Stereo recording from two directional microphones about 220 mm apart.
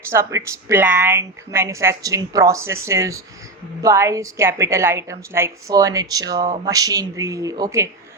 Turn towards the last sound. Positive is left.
turn(degrees=-15)  # may be behind; listen again after turning